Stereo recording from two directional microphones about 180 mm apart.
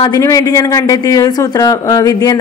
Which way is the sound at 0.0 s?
20° left (ahead or behind).